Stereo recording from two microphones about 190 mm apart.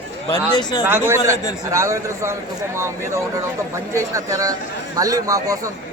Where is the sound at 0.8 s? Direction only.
10° right (ahead or behind).